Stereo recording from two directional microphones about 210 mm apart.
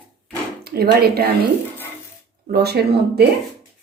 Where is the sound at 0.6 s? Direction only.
50° right (ahead or behind).